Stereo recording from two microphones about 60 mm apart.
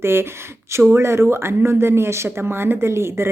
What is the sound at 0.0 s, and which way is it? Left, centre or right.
Speech, right.